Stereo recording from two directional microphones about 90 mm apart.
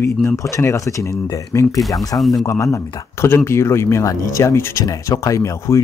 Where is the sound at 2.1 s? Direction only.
Centre (ahead or behind).